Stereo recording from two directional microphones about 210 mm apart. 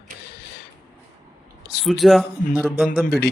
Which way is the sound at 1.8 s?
Centre (ahead or behind).